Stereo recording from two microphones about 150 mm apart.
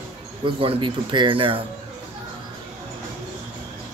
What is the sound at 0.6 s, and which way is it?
Speech, 35° right (ahead or behind).